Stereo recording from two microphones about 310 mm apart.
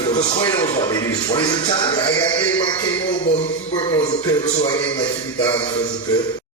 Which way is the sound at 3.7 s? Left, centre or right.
Centre.